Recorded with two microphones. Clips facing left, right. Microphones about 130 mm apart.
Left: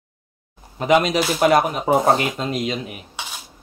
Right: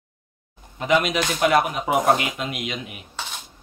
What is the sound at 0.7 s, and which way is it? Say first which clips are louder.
Speech: left 4 dB; 40° left (ahead or behind).